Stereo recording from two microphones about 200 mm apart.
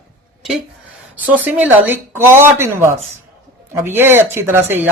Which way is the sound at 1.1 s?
10° right (ahead or behind).